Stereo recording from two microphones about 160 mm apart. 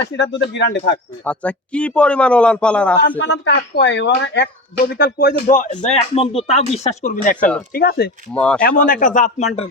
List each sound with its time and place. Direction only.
0.1 s speech: 90° left
1.2 s speech: 10° left (ahead or behind)
3.2 s speech: 90° left
4.9 s speech: 75° left (ahead or behind); by 7.5 s 55° left (ahead or behind)
7.7 s speech: 75° left (ahead or behind)
8.3 s speech: 5° left (ahead or behind)
8.6 s speech: 60° left (ahead or behind)